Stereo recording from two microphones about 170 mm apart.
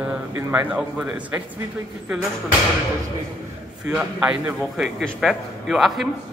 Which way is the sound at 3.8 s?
5° right (ahead or behind).